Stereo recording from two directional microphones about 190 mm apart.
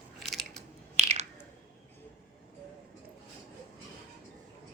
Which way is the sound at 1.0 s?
35° right (ahead or behind).